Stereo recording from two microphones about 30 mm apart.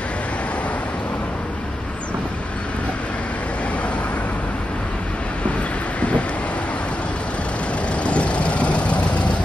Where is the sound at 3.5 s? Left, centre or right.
Left.